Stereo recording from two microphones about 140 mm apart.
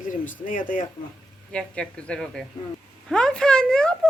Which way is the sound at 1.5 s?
5° left (ahead or behind).